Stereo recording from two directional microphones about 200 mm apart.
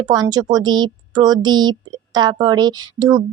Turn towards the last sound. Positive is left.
turn(degrees=-20)  # may be behind; listen again after turning